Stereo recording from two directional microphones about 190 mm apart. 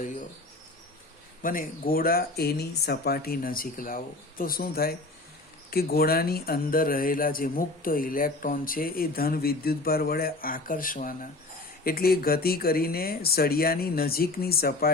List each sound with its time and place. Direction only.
1.4 s speech: 45° left (ahead or behind)